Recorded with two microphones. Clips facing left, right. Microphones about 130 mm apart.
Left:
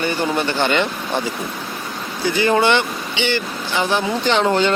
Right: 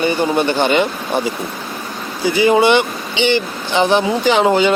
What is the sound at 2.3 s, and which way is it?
Speech, 15° right (ahead or behind).